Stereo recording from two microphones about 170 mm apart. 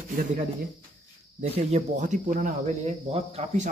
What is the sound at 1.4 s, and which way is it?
Speech, 45° right (ahead or behind).